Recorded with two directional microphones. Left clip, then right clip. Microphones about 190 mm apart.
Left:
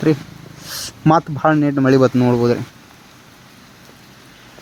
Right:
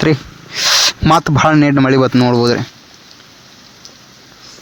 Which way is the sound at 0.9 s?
20° right (ahead or behind).